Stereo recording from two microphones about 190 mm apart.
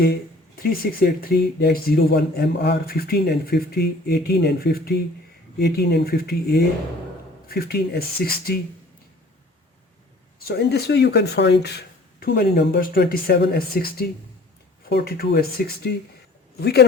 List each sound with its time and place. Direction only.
0.0 s speech: 55° left (ahead or behind)
10.4 s speech: 60° left (ahead or behind)